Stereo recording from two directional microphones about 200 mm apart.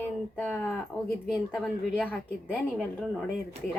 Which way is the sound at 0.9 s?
20° left (ahead or behind).